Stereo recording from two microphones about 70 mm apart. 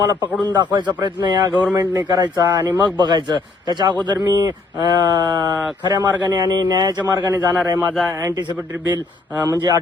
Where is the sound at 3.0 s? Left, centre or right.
Right.